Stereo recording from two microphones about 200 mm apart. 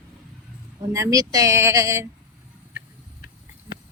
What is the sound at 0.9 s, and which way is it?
Speech, 20° right (ahead or behind).